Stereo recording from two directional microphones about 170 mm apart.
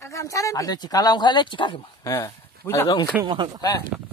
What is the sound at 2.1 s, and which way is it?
Speech, 15° left (ahead or behind).